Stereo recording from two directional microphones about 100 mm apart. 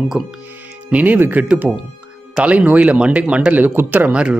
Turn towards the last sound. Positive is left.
turn(degrees=-10)  # may be behind; listen again after turning